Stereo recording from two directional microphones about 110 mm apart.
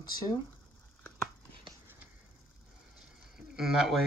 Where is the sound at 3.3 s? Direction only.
5° right (ahead or behind).